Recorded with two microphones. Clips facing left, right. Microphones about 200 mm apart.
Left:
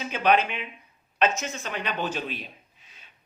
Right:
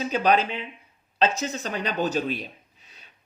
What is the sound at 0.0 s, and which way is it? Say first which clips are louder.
A man's voice: right 1 dB; 40° right (ahead or behind).